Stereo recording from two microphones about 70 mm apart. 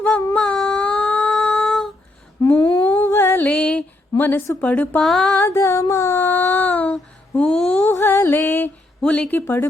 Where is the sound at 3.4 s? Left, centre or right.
Centre.